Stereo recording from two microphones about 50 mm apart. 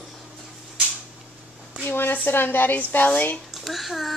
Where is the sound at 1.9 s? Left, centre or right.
Left.